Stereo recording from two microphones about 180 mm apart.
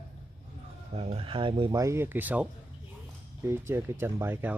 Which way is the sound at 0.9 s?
35° right (ahead or behind).